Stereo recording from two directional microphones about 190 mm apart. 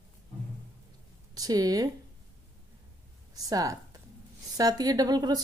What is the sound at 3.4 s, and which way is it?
A woman's voice, 20° right (ahead or behind).